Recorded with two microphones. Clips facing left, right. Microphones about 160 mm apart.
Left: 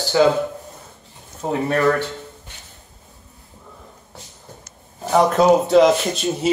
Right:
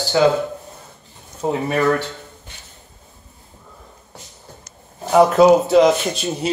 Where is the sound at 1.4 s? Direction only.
15° right (ahead or behind).